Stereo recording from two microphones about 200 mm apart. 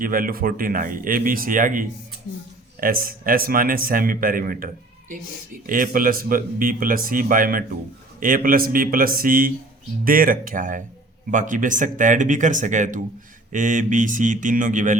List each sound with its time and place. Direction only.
0.0 s speech: 45° right (ahead or behind)